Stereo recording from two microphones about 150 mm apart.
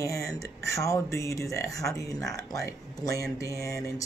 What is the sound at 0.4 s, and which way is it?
Speech, 20° left (ahead or behind).